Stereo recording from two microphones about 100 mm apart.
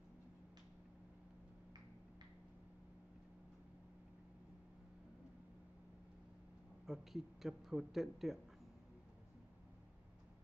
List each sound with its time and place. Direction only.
6.9 s a man's voice: centre (ahead or behind)